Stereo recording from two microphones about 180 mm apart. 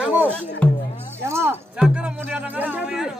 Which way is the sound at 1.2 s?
15° right (ahead or behind).